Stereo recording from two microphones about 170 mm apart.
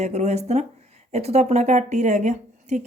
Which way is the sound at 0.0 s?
40° right (ahead or behind).